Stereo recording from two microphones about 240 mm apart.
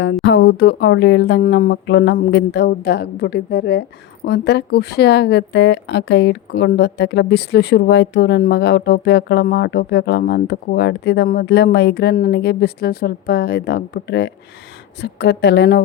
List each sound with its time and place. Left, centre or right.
0.0 s a woman's voice: left